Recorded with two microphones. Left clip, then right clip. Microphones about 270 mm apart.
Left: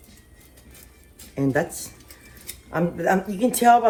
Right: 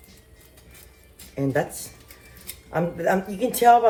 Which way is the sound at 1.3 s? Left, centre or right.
Left.